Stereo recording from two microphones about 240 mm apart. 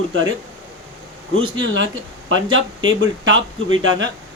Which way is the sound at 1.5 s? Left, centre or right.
Right.